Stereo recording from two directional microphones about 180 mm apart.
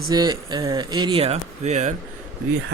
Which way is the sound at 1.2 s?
35° right (ahead or behind).